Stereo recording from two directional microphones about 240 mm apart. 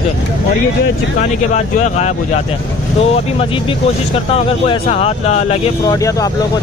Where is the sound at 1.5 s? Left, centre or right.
Left.